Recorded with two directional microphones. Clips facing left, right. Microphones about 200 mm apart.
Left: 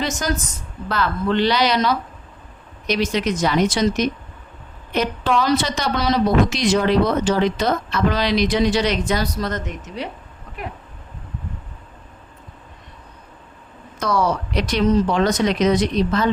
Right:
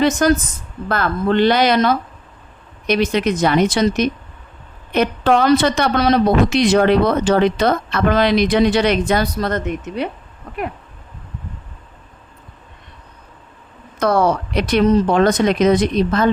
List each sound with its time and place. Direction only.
0.0 s a woman's voice: 60° right (ahead or behind)
14.0 s speech: 55° right (ahead or behind)